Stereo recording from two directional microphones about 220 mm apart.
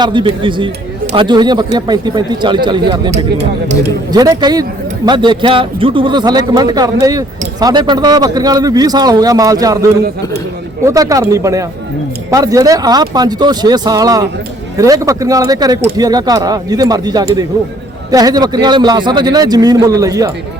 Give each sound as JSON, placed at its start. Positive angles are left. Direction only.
{"t": 0.0, "sound": "a man's voice", "side_deg": -20}
{"t": 10.8, "sound": "a man's voice", "side_deg": -15}